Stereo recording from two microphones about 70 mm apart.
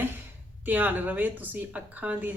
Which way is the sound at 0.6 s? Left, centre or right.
Right.